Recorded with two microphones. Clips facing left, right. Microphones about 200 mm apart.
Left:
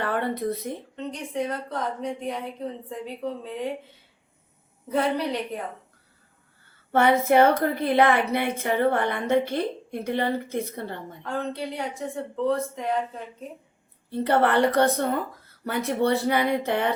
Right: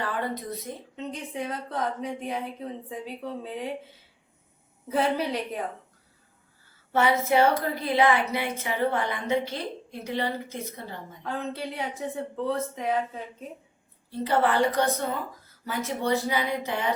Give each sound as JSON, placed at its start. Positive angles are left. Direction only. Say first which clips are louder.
{"t": 0.0, "sound": "speech", "louder": "left 5 dB", "side_deg": 60}
{"t": 0.9, "sound": "speech", "louder": "left 3 dB", "side_deg": 0}
{"t": 4.9, "sound": "speech", "louder": "left 1 dB", "side_deg": 0}
{"t": 6.9, "sound": "a woman's voice", "louder": "left 4 dB", "side_deg": 55}
{"t": 11.3, "sound": "speech", "louder": "left 2 dB", "side_deg": 0}
{"t": 14.1, "sound": "a woman's voice", "louder": "left 3 dB", "side_deg": 60}